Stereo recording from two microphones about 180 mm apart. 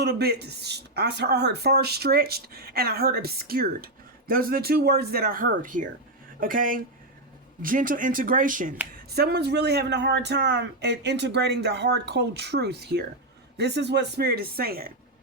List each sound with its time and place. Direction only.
0.0 s speech: 65° right (ahead or behind); by 8.7 s 50° right (ahead or behind)
9.0 s speech: 65° right (ahead or behind)